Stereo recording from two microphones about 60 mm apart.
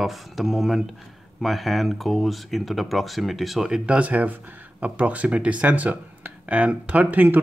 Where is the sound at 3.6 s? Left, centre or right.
Centre.